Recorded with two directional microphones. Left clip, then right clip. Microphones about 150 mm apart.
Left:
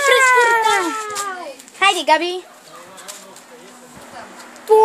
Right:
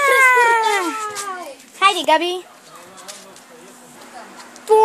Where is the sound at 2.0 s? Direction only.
25° right (ahead or behind).